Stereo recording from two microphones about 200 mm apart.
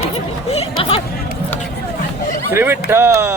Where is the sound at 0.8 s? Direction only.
30° left (ahead or behind).